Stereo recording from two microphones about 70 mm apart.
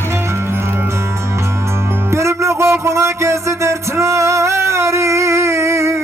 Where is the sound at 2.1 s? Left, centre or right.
Right.